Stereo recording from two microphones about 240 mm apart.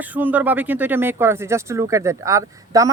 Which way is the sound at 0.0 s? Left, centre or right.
Centre.